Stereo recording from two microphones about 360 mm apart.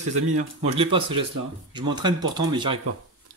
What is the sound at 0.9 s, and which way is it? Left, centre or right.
Speech, right.